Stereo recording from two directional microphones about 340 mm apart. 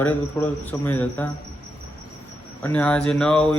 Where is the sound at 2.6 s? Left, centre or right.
Centre.